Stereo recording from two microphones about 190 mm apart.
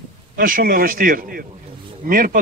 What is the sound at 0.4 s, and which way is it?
A man's voice, 45° right (ahead or behind).